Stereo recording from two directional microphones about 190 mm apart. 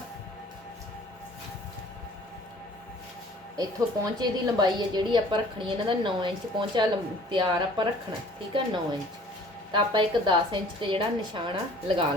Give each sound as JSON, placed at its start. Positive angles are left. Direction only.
{"t": 3.6, "sound": "a woman's voice", "side_deg": -20}